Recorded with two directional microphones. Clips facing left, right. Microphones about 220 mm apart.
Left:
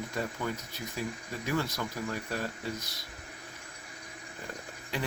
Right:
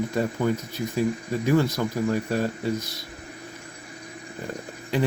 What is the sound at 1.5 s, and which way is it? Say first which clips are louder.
Speech: right 10 dB; 30° right (ahead or behind).